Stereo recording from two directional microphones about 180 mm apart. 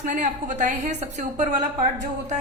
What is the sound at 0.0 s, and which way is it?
A woman's voice, 45° right (ahead or behind).